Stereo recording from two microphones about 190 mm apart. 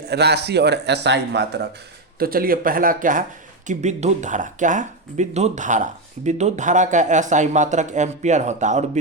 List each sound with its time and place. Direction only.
0.0 s a man's voice: 60° right (ahead or behind)
2.1 s speech: 50° right (ahead or behind)